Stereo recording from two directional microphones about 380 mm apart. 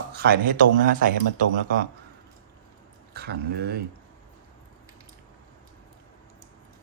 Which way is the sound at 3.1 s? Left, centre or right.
Right.